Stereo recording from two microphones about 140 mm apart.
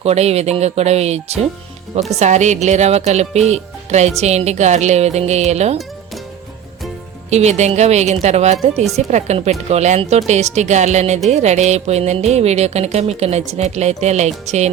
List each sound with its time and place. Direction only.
0.0 s speech: 50° right (ahead or behind)
7.3 s speech: 50° right (ahead or behind)
8.7 s speech: centre (ahead or behind)
9.0 s speech: 55° right (ahead or behind)